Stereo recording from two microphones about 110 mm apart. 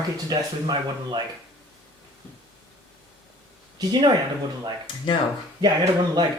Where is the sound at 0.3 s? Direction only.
40° right (ahead or behind).